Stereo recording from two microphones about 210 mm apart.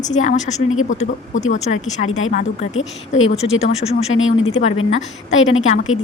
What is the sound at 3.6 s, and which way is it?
Speech, 30° left (ahead or behind).